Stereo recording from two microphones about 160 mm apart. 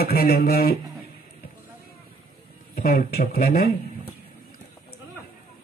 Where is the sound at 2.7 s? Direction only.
70° left (ahead or behind).